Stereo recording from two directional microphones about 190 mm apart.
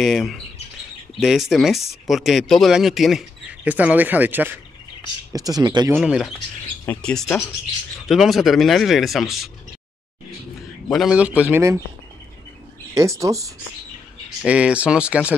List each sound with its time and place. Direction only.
0.0 s speech: centre (ahead or behind); by 5.9 s 20° right (ahead or behind)
5.9 s a man's voice: 5° right (ahead or behind)
6.9 s speech: 5° left (ahead or behind)
10.9 s a man's voice: centre (ahead or behind)
12.9 s a man's voice: 15° right (ahead or behind)
14.4 s speech: 5° right (ahead or behind)